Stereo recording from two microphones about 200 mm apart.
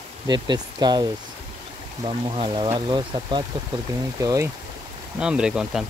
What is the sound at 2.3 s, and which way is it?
Speech, 25° right (ahead or behind).